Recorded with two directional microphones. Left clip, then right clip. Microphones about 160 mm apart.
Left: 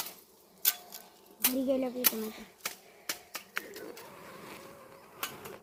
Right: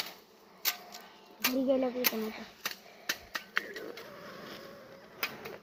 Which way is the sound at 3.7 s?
5° right (ahead or behind).